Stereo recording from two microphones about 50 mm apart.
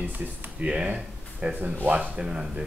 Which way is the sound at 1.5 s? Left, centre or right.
Right.